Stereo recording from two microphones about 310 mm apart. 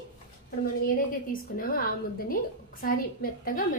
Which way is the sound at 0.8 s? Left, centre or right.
Left.